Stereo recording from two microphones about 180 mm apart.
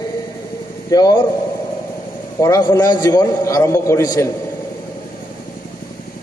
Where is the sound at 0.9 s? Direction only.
20° left (ahead or behind).